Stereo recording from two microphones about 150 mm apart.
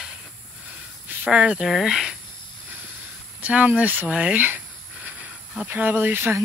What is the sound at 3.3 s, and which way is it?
Speech, 10° right (ahead or behind).